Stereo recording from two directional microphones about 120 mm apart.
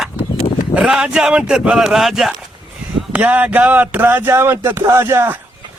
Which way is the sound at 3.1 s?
15° right (ahead or behind).